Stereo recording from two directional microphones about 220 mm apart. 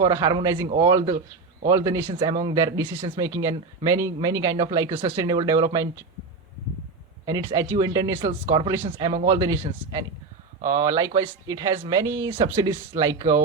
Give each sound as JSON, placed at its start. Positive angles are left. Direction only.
{"t": 0.0, "sound": "speech", "side_deg": -15}
{"t": 7.3, "sound": "a man's voice", "side_deg": -15}